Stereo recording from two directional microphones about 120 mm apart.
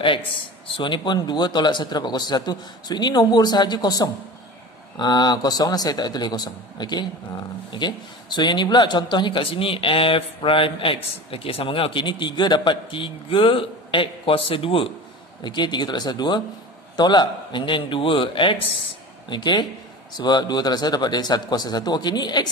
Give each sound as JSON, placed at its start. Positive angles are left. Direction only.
{"t": 0.7, "sound": "a man's voice", "side_deg": 40}